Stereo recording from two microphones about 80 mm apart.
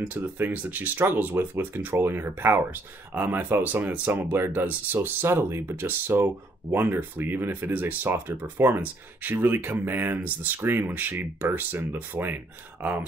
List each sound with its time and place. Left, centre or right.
0.0 s speech: right